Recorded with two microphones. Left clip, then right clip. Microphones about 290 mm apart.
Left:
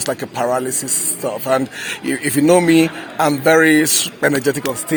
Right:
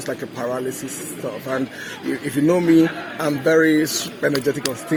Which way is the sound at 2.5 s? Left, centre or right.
Left.